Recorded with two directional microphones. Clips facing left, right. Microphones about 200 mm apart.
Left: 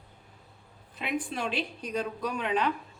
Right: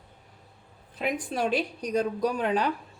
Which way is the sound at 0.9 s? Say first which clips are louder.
Right 4 dB; 40° right (ahead or behind).